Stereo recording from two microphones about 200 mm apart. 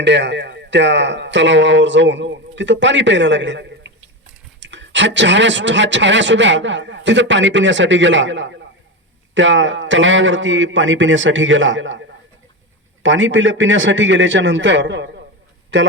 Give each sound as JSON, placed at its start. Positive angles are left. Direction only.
{"t": 0.0, "sound": "a man's voice", "side_deg": -60}